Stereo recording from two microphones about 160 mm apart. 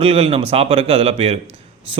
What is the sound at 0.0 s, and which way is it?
Speech, 40° right (ahead or behind).